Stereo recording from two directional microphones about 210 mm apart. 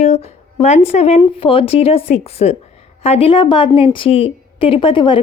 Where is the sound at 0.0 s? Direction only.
30° left (ahead or behind).